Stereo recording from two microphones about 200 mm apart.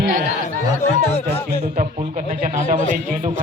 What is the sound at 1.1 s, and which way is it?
Speech, 30° left (ahead or behind).